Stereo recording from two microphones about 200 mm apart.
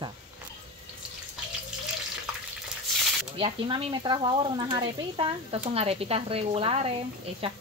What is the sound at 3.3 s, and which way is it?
Speech, 25° right (ahead or behind).